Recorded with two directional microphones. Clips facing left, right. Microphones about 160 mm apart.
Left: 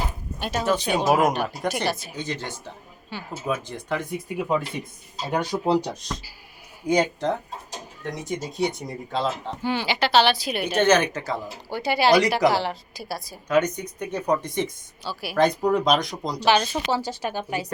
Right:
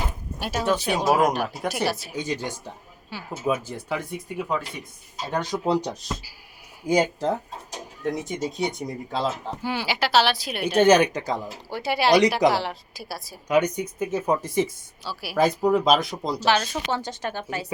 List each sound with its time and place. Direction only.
0.3 s speech: 5° right (ahead or behind)
5.3 s a woman's voice: 10° left (ahead or behind)
6.0 s speech: 5° right (ahead or behind)
11.7 s speech: centre (ahead or behind)
16.6 s a woman's voice: 10° left (ahead or behind)